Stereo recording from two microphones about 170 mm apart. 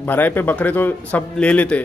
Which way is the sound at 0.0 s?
10° left (ahead or behind).